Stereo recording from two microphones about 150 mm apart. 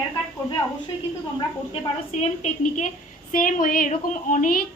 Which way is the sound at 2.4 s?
55° left (ahead or behind).